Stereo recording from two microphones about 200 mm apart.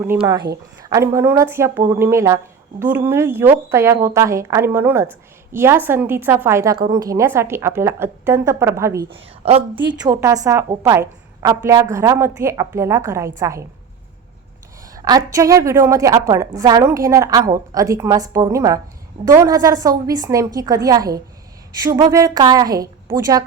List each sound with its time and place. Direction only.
0.2 s a woman's voice: 20° right (ahead or behind)
9.1 s a woman's voice: 30° right (ahead or behind)
10.0 s a woman's voice: 15° right (ahead or behind)
14.9 s a woman's voice: 20° right (ahead or behind)